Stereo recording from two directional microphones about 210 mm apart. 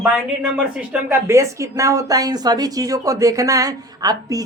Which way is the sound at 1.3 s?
15° right (ahead or behind).